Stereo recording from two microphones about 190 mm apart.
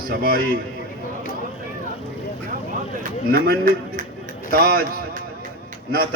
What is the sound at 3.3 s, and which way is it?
A man's voice, 45° right (ahead or behind).